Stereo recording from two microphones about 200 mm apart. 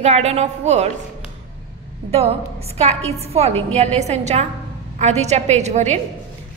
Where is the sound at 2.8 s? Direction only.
30° right (ahead or behind).